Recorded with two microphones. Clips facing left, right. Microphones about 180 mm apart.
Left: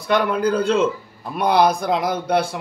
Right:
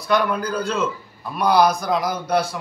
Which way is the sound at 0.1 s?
25° left (ahead or behind).